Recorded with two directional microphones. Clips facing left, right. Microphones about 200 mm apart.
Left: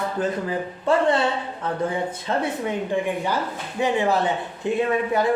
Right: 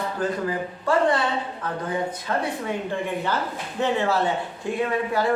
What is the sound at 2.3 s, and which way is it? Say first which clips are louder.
Speech: left 2 dB; 25° left (ahead or behind).